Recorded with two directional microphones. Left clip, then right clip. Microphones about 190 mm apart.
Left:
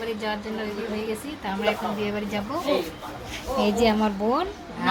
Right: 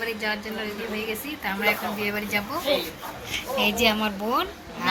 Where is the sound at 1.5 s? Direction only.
15° left (ahead or behind).